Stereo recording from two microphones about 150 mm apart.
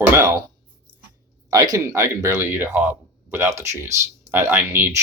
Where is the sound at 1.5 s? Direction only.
25° right (ahead or behind).